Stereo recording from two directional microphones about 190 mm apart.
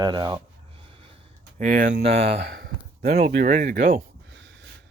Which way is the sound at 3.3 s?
45° right (ahead or behind).